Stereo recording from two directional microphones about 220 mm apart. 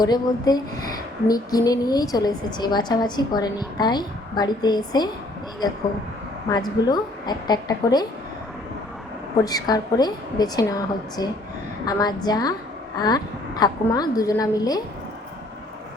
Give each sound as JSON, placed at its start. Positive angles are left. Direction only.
{"t": 0.0, "sound": "speech", "side_deg": 20}
{"t": 6.5, "sound": "a woman's voice", "side_deg": 20}
{"t": 9.4, "sound": "speech", "side_deg": 15}